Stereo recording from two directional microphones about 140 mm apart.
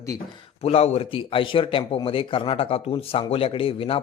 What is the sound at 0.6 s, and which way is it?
Speech, 45° left (ahead or behind).